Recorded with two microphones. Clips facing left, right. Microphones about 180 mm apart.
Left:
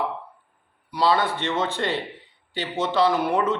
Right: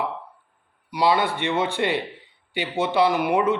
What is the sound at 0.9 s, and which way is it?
Speech, 15° right (ahead or behind).